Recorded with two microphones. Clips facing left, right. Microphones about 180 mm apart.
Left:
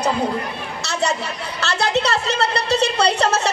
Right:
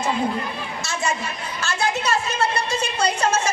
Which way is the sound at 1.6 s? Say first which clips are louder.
Left 4 dB; 70° left (ahead or behind).